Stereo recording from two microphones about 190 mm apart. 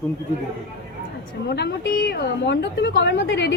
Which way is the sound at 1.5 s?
60° left (ahead or behind).